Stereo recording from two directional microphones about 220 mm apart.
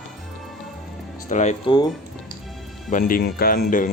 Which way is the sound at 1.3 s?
30° left (ahead or behind).